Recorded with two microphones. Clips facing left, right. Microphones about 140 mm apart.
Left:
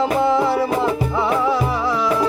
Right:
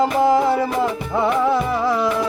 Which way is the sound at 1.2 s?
50° right (ahead or behind).